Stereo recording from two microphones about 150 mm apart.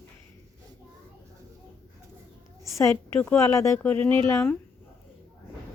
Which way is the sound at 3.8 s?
10° left (ahead or behind).